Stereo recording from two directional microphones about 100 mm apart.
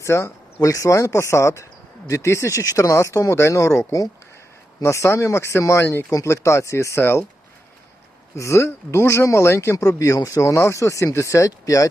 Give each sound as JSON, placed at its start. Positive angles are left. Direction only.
{"t": 0.0, "sound": "speech", "side_deg": 25}
{"t": 8.4, "sound": "speech", "side_deg": 30}